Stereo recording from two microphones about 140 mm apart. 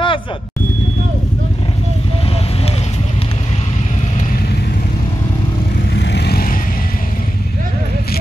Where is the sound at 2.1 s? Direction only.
45° left (ahead or behind).